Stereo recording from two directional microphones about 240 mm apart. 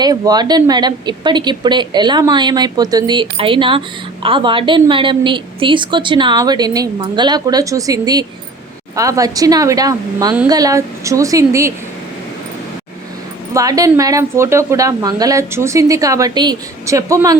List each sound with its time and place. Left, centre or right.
0.0 s speech: centre
13.5 s speech: centre